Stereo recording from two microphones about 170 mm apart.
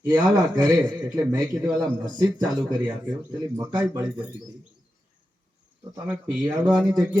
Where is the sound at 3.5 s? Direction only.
15° right (ahead or behind).